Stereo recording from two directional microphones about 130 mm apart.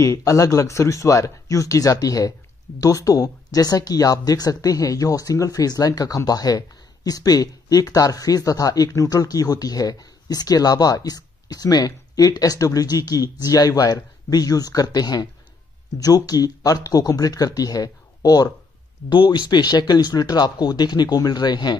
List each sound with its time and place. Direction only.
0.0 s speech: 25° left (ahead or behind)